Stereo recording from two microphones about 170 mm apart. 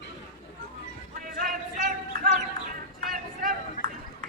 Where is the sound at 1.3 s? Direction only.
55° right (ahead or behind).